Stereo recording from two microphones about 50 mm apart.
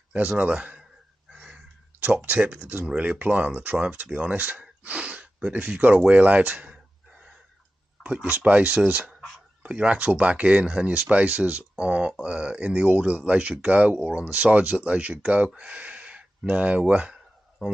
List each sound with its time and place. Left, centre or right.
0.4 s a man's voice: right
1.3 s a sound: right
2.2 s speech: right
8.0 s a sound: right
8.4 s speech: right
17.6 s speech: centre